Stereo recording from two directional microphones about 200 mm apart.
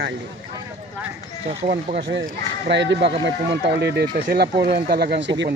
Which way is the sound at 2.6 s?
60° right (ahead or behind).